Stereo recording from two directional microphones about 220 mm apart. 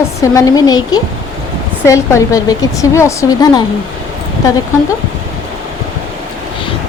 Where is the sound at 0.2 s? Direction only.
15° left (ahead or behind).